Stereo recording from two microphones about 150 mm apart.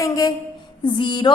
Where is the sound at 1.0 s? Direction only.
30° left (ahead or behind).